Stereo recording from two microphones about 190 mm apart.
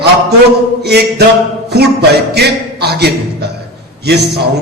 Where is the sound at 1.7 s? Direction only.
60° right (ahead or behind).